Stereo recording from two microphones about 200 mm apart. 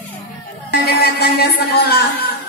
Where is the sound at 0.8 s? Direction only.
55° left (ahead or behind).